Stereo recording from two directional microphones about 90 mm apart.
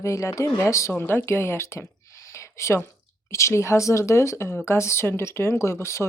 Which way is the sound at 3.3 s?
30° left (ahead or behind).